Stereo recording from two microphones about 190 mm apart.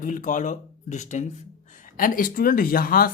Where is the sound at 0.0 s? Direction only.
45° left (ahead or behind).